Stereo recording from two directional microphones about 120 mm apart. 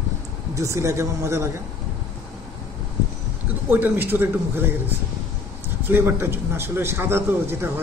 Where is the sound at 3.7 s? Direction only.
15° right (ahead or behind).